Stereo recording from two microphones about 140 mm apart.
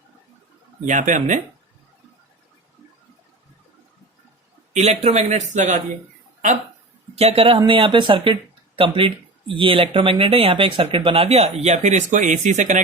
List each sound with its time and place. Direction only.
0.9 s speech: 65° right (ahead or behind)
4.7 s speech: 50° right (ahead or behind)
7.2 s speech: 45° right (ahead or behind)